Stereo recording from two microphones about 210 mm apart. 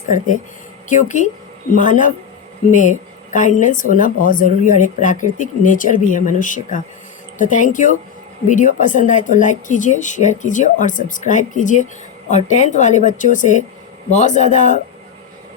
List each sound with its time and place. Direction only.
0.9 s speech: 35° left (ahead or behind)
3.3 s speech: 35° left (ahead or behind)